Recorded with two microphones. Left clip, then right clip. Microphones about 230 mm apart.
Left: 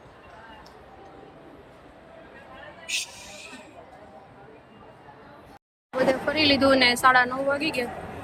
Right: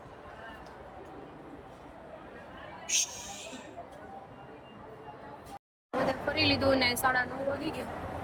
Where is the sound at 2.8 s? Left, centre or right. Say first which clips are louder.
Left 1 dB; centre.